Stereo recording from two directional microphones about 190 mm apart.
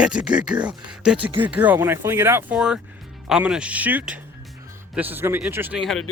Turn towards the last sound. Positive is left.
turn(degrees=0)  # may be behind; listen again after turning